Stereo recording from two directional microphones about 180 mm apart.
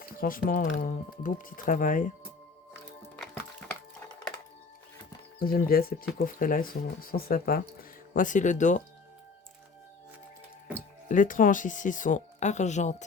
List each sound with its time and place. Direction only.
0.2 s speech: 55° left (ahead or behind)
5.4 s speech: 55° left (ahead or behind)
11.1 s speech: 45° left (ahead or behind)